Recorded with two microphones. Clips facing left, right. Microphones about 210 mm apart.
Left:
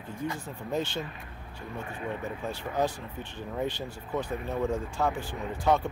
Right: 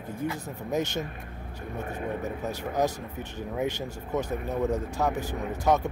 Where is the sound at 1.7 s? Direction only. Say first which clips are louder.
Right 4 dB; 40° right (ahead or behind).